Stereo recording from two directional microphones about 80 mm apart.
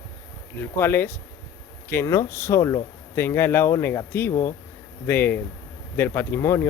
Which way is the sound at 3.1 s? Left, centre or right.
Left.